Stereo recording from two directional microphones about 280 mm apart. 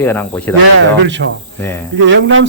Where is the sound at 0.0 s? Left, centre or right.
Centre.